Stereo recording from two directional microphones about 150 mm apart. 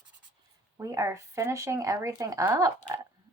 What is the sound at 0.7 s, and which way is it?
Speech, 20° right (ahead or behind).